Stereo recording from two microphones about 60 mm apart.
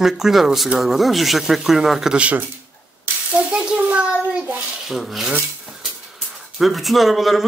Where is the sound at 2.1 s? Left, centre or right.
Right.